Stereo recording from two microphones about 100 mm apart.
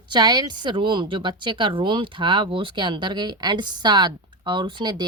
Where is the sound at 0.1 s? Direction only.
45° right (ahead or behind).